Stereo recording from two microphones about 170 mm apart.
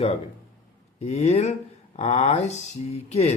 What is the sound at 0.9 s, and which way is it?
Speech, 40° left (ahead or behind).